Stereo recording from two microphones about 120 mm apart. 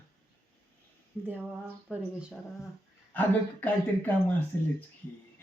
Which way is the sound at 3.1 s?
15° left (ahead or behind).